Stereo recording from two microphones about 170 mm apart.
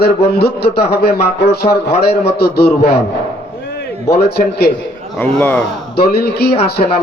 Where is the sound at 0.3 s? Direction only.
70° left (ahead or behind).